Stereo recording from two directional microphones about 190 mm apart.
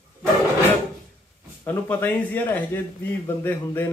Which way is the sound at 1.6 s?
10° left (ahead or behind).